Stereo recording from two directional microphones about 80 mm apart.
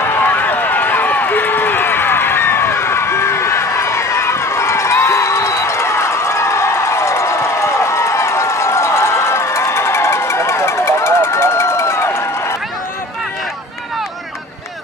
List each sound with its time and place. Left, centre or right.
0.0 s run: left